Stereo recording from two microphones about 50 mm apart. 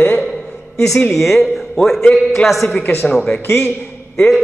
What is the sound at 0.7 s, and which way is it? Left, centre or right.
A man's voice, centre.